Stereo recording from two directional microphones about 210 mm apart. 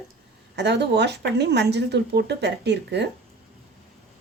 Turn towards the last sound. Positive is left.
turn(degrees=-55)  # may be behind; listen again after turning